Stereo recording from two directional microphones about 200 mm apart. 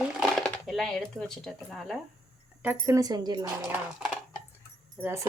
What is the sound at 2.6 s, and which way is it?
Speech, 10° right (ahead or behind).